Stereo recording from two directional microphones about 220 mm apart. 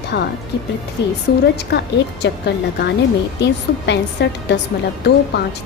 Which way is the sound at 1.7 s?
50° left (ahead or behind).